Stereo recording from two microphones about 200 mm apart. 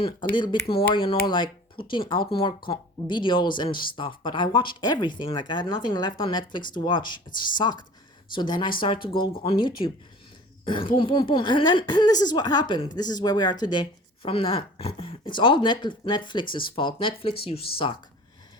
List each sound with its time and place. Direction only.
0.3 s a woman's voice: 20° left (ahead or behind)
10.9 s a woman's voice: 25° left (ahead or behind)